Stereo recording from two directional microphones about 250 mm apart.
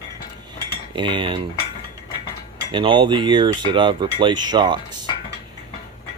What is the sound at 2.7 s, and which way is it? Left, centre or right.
Speech, centre.